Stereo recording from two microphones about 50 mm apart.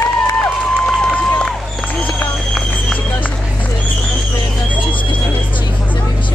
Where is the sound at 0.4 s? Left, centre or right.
Centre.